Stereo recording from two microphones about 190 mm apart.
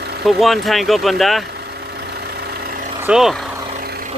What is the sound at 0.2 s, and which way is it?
Speech, centre (ahead or behind).